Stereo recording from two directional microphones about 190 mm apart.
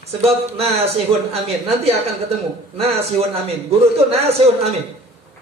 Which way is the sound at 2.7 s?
30° right (ahead or behind).